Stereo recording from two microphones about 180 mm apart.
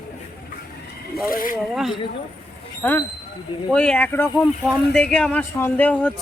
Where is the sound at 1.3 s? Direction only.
50° left (ahead or behind).